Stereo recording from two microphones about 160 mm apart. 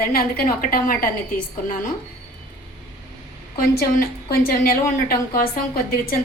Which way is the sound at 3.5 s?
65° left (ahead or behind).